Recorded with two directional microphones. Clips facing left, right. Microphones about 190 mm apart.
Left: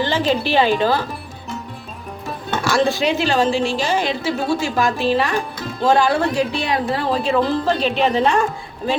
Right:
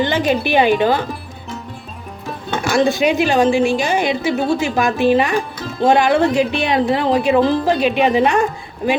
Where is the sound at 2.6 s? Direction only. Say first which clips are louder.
Right 2 dB; 15° right (ahead or behind).